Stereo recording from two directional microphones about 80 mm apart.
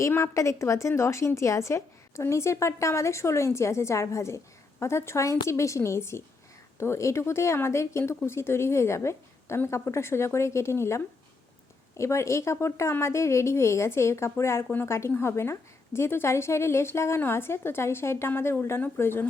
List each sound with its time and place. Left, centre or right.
0.1 s a woman's voice: left